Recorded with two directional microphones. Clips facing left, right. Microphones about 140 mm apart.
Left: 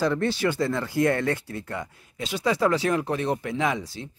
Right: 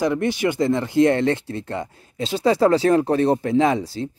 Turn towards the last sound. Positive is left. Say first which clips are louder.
# right 8 dB
turn(degrees=-30)  # may be behind; listen again after turning